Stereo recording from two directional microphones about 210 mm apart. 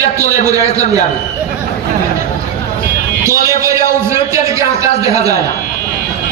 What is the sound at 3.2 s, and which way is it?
A man's voice, 15° right (ahead or behind).